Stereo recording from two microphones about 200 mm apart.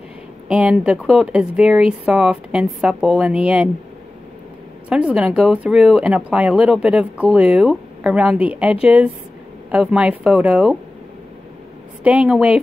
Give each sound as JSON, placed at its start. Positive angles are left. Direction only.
{"t": 0.5, "sound": "speech", "side_deg": -5}
{"t": 4.8, "sound": "speech", "side_deg": -5}
{"t": 12.0, "sound": "speech", "side_deg": -5}